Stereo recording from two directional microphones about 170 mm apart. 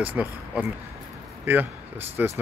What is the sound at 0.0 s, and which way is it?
Speech, 10° right (ahead or behind).